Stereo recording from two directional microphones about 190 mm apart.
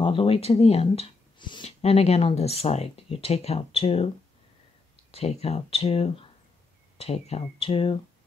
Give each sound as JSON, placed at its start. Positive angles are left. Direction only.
{"t": 0.0, "sound": "speech", "side_deg": 30}
{"t": 5.1, "sound": "speech", "side_deg": 30}